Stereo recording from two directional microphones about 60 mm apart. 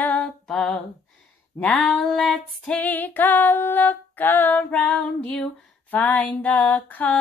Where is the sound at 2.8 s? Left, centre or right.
Left.